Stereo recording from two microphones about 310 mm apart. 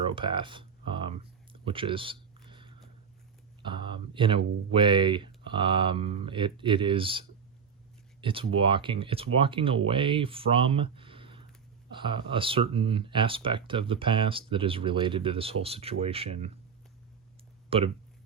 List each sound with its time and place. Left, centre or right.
0.1 s a sound: centre
3.6 s speech: centre
17.7 s speech: centre